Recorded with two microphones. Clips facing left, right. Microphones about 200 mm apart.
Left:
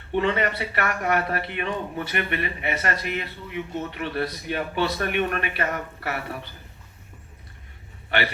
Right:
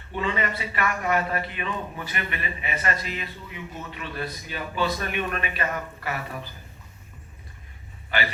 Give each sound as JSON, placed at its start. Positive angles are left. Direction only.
{"t": 0.1, "sound": "a man's voice", "side_deg": 65}